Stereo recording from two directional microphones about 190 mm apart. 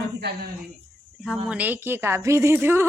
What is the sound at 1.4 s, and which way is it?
Speech, 10° right (ahead or behind).